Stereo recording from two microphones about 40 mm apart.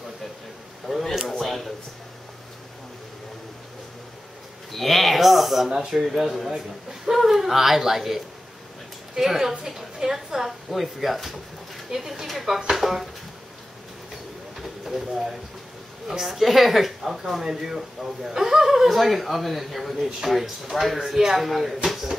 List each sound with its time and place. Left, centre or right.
0.8 s a sound: centre
4.7 s a sound: centre
5.7 s a woman's voice: centre
6.0 s a woman's voice: centre
12.7 s speech: centre
14.6 s vehicle: centre
16.1 s a woman's voice: centre